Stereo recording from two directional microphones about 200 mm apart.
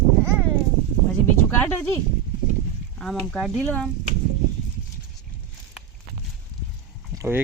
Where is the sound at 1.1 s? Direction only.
10° left (ahead or behind).